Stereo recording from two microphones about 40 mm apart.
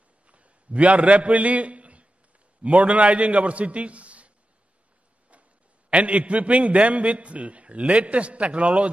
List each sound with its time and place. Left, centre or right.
0.3 s a sound: right
2.6 s a man's voice: right
5.9 s a man's voice: right